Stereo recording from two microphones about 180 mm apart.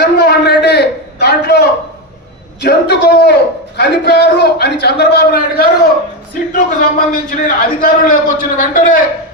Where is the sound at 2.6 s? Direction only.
65° left (ahead or behind).